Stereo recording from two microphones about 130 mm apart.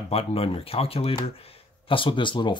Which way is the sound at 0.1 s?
50° left (ahead or behind).